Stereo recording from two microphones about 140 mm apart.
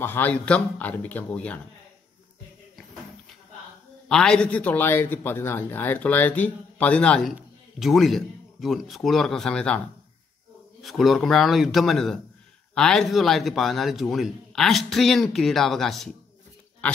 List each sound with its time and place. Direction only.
0.0 s a man's voice: 15° left (ahead or behind)
4.1 s a man's voice: 5° left (ahead or behind)
10.8 s a man's voice: centre (ahead or behind)